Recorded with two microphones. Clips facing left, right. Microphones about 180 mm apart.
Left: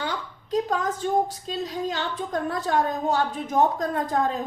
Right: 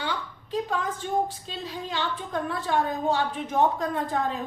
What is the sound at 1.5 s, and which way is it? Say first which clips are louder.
A woman's voice: left 6 dB; 45° left (ahead or behind).